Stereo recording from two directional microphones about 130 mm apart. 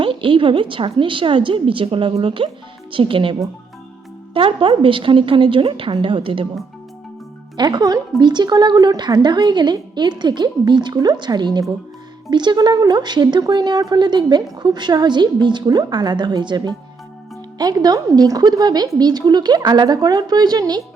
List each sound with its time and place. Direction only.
0.0 s speech: 40° right (ahead or behind)
4.4 s speech: 40° right (ahead or behind)
7.5 s speech: 35° right (ahead or behind)